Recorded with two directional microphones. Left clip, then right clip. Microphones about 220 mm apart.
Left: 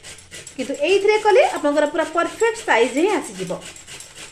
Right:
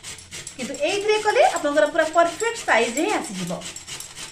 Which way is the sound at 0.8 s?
40° left (ahead or behind).